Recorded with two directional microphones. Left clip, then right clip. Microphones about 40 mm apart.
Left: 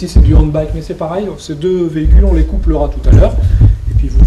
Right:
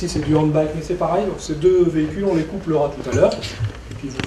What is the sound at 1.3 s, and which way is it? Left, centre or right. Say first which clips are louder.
Speech: left 1 dB; right.